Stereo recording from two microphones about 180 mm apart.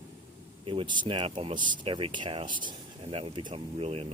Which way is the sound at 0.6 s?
25° right (ahead or behind).